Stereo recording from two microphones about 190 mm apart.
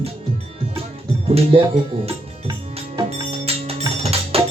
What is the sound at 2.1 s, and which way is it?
Music, 30° right (ahead or behind).